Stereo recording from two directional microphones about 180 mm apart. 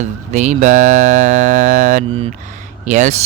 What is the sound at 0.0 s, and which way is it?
Speech, 40° right (ahead or behind).